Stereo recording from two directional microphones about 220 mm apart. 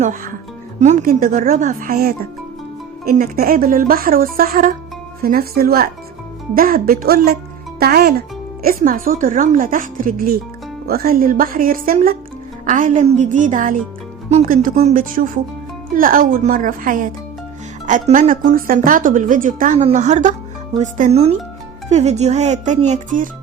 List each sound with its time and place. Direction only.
0.8 s speech: 35° right (ahead or behind)